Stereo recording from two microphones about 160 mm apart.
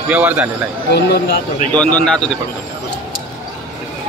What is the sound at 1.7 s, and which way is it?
Speech, 10° left (ahead or behind).